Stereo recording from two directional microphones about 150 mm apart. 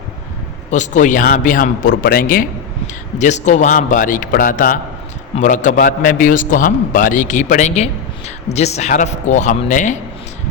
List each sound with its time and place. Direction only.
0.7 s a man's voice: 55° left (ahead or behind)